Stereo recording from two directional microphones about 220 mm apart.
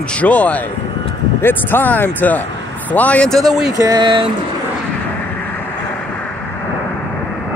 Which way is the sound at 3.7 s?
15° right (ahead or behind).